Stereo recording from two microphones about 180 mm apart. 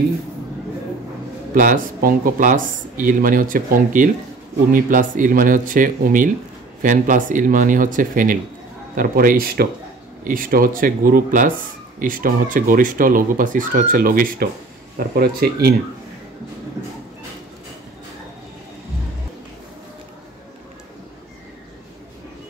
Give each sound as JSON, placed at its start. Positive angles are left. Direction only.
{"t": 1.5, "sound": "a man's voice", "side_deg": -50}